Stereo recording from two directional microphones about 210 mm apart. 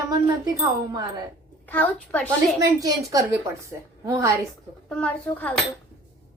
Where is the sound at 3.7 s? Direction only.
15° right (ahead or behind).